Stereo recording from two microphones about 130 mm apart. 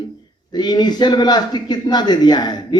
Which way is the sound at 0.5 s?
35° left (ahead or behind).